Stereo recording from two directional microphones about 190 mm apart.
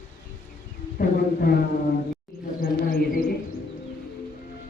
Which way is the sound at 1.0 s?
50° left (ahead or behind).